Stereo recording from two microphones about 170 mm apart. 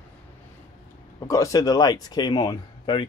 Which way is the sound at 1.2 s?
20° left (ahead or behind).